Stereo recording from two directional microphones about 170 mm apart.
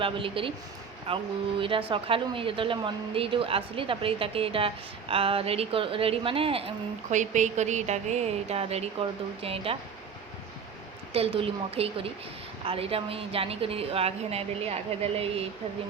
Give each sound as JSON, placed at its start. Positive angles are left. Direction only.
{"t": 0.0, "sound": "speech", "side_deg": -30}
{"t": 7.1, "sound": "speech", "side_deg": -45}
{"t": 11.1, "sound": "speech", "side_deg": -35}